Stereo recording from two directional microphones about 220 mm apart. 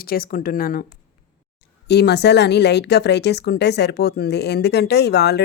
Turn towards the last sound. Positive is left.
turn(degrees=50)  # may be behind; listen again after turning